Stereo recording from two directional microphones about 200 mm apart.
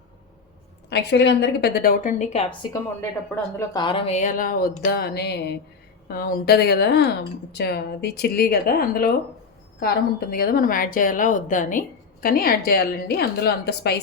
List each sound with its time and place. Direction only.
0.9 s a woman's voice: 55° left (ahead or behind)